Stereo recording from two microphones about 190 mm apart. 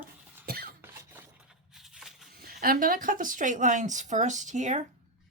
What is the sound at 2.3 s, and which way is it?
A woman's voice, 50° right (ahead or behind).